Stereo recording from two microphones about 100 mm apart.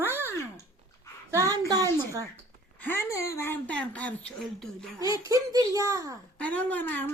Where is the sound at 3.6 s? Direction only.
15° left (ahead or behind).